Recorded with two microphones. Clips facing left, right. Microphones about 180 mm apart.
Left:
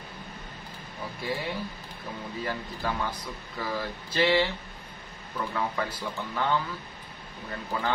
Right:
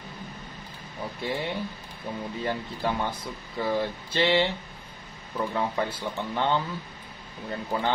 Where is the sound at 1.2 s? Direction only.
25° right (ahead or behind).